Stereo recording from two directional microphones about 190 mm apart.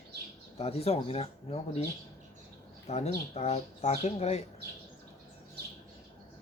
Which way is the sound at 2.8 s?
35° left (ahead or behind).